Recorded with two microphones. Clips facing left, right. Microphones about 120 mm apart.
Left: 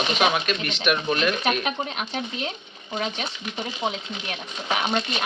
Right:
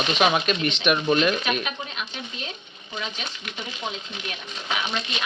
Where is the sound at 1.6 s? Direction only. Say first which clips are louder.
Left 4 dB; 50° left (ahead or behind).